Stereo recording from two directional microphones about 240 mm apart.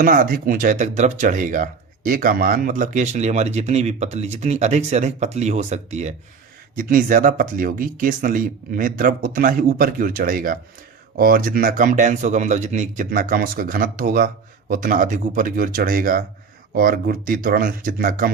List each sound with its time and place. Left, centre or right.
0.0 s speech: right